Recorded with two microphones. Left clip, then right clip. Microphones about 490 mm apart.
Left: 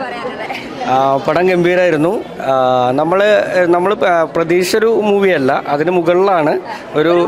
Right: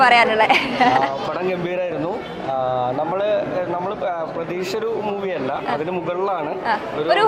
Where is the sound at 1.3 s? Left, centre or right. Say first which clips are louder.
Left 11 dB; left.